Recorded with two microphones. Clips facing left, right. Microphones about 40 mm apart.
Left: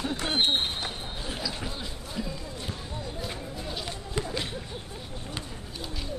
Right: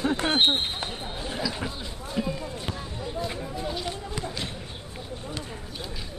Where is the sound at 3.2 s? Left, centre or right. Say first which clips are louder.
Right 5 dB; centre.